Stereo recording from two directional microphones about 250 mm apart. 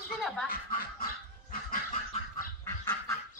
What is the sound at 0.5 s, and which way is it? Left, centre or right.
Speech, left.